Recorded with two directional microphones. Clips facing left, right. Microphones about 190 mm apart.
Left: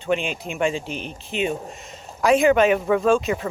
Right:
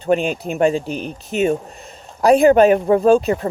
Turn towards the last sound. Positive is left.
turn(degrees=-40)  # may be behind; listen again after turning